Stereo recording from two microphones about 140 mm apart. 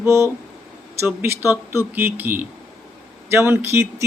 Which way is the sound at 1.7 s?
15° right (ahead or behind).